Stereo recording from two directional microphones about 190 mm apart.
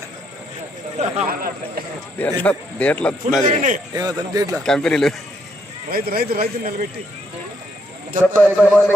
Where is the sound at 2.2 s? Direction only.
10° left (ahead or behind).